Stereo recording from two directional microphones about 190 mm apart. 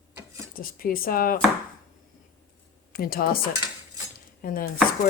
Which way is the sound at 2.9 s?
50° left (ahead or behind).